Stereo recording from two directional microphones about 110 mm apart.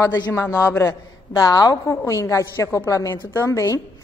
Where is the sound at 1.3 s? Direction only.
35° left (ahead or behind).